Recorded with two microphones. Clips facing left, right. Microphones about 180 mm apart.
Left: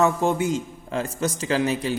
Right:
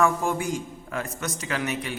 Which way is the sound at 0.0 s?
25° left (ahead or behind).